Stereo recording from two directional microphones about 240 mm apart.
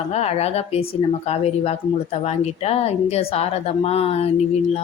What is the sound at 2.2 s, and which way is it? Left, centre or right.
A woman's voice, left.